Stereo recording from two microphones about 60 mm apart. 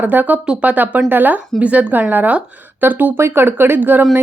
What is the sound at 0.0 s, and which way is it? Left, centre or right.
A woman's voice, right.